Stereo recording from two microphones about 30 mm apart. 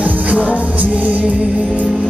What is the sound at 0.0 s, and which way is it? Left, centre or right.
Music, right.